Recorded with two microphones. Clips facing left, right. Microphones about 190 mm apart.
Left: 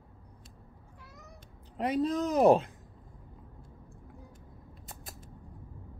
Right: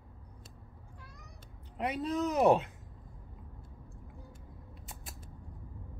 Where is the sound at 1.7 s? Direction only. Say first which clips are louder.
Left 4 dB; 35° left (ahead or behind).